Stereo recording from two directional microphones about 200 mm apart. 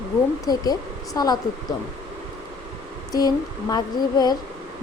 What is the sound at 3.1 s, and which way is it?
A woman's voice, 20° left (ahead or behind).